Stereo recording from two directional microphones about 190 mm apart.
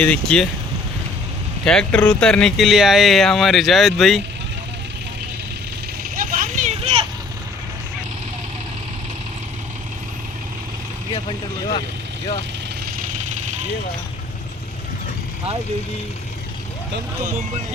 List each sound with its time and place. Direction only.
0.0 s speech: 5° left (ahead or behind)
1.6 s speech: 5° left (ahead or behind)
6.1 s vehicle: 45° right (ahead or behind)
13.2 s vehicle: 40° right (ahead or behind)